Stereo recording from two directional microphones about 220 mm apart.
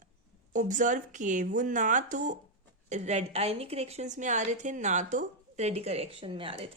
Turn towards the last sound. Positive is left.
turn(degrees=-25)  # may be behind; listen again after turning